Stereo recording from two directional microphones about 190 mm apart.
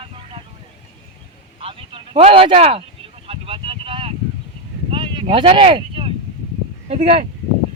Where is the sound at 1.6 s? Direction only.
30° right (ahead or behind).